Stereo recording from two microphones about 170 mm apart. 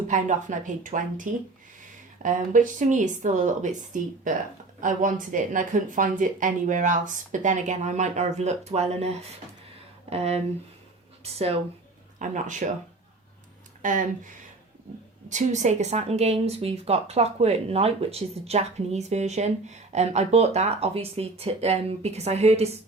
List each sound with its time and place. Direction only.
0.1 s speech: 50° right (ahead or behind)
4.8 s speech: 50° right (ahead or behind)
13.8 s speech: 50° right (ahead or behind)
15.3 s speech: 45° right (ahead or behind)